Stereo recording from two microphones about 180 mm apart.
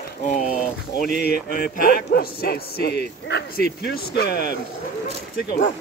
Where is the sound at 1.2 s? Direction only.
60° left (ahead or behind).